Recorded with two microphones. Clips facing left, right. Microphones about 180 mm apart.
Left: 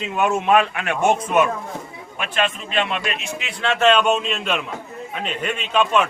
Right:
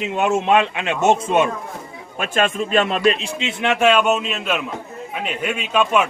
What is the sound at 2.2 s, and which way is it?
A man's voice, 45° right (ahead or behind).